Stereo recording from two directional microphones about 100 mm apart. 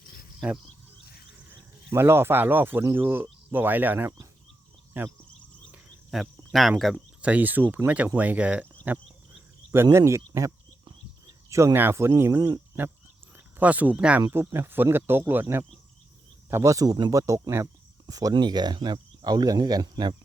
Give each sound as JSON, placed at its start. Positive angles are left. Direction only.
{"t": 0.3, "sound": "speech", "side_deg": -5}
{"t": 1.9, "sound": "speech", "side_deg": -25}
{"t": 6.1, "sound": "speech", "side_deg": 0}
{"t": 6.9, "sound": "speech", "side_deg": -15}
{"t": 12.4, "sound": "speech", "side_deg": -40}
{"t": 13.3, "sound": "speech", "side_deg": -15}
{"t": 14.2, "sound": "speech", "side_deg": -25}